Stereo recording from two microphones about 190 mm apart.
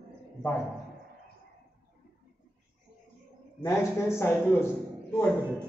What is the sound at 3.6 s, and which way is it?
A man's voice, 15° left (ahead or behind).